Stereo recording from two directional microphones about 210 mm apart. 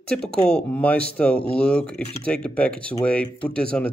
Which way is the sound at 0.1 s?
5° left (ahead or behind).